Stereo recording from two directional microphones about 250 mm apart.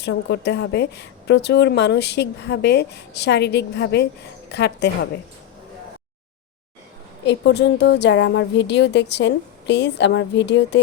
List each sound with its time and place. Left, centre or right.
0.0 s a woman's voice: left
7.3 s a woman's voice: left